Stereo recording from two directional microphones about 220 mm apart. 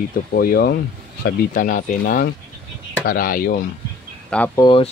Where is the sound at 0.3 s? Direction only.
45° left (ahead or behind).